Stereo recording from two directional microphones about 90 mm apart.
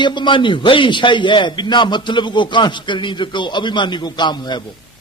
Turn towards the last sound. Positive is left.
turn(degrees=55)  # may be behind; listen again after turning